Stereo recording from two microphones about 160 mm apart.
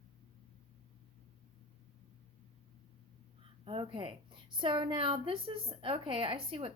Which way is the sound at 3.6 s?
35° right (ahead or behind).